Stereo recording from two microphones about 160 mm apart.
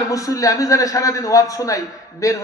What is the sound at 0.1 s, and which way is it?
A man's voice, 20° left (ahead or behind).